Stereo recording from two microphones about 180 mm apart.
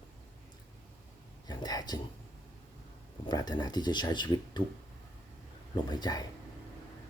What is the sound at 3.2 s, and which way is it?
Speech, 25° left (ahead or behind).